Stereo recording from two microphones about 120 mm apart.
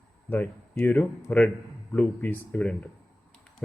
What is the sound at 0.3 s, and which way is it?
Speech, 15° left (ahead or behind).